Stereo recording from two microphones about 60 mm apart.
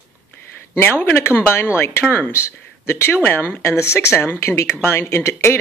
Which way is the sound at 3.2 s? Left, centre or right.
Left.